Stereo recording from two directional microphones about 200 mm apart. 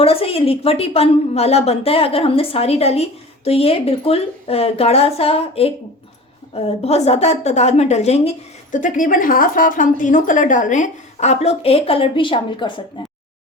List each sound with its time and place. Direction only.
0.0 s a woman's voice: 30° left (ahead or behind)